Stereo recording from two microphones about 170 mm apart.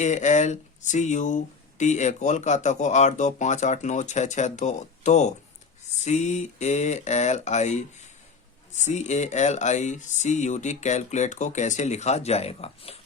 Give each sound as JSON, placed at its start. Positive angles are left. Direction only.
{"t": 0.0, "sound": "speech", "side_deg": 45}